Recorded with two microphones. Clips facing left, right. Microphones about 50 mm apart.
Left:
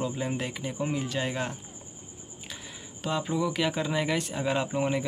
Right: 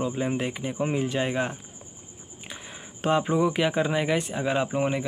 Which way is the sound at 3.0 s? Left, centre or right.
Right.